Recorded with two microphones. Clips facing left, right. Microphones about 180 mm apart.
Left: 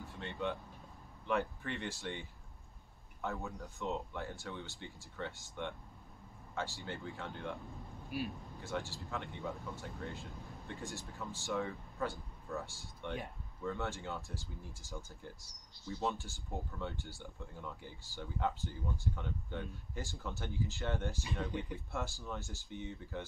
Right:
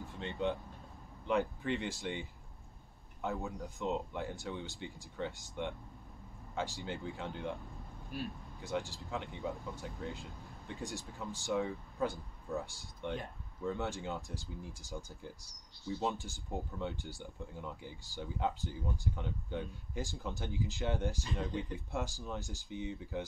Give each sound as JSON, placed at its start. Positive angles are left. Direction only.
{"t": 0.0, "sound": "speech", "side_deg": -20}
{"t": 8.1, "sound": "speech", "side_deg": 10}
{"t": 8.6, "sound": "speech", "side_deg": -15}
{"t": 21.5, "sound": "speech", "side_deg": 10}
{"t": 21.7, "sound": "speech", "side_deg": -15}